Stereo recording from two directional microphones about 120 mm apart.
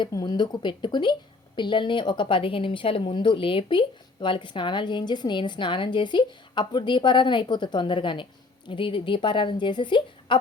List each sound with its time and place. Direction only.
0.1 s a woman's voice: 35° left (ahead or behind)